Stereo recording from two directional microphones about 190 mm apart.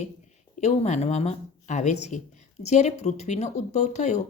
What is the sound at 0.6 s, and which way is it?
Speech, 35° left (ahead or behind).